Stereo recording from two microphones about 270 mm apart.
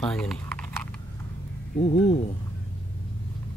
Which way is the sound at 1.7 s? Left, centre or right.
Left.